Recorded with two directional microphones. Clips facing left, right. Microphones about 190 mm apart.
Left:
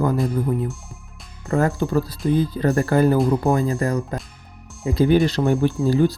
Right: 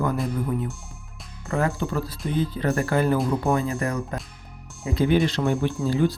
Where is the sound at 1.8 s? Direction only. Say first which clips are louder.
Left 6 dB; 35° left (ahead or behind).